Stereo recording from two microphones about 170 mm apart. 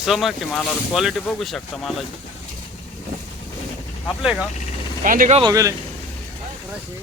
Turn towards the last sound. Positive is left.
turn(degrees=-20)  # may be behind; listen again after turning